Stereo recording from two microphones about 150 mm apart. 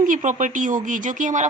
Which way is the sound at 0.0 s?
60° right (ahead or behind).